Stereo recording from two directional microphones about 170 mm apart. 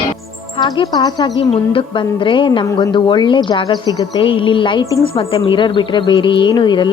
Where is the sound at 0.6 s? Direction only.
25° left (ahead or behind).